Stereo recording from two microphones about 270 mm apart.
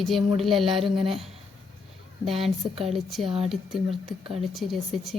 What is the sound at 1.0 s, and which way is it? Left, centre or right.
Speech, centre.